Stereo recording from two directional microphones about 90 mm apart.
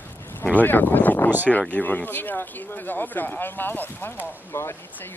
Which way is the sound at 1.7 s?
20° left (ahead or behind).